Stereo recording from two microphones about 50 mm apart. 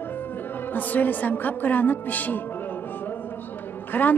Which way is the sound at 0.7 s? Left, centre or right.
Left.